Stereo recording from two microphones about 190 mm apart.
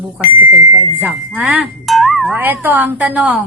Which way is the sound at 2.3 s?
10° right (ahead or behind).